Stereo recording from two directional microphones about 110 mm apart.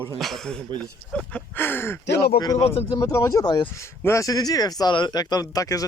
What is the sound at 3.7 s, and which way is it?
Speech, 25° left (ahead or behind).